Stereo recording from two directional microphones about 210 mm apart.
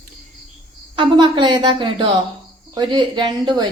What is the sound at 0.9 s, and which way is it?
Speech, 25° right (ahead or behind).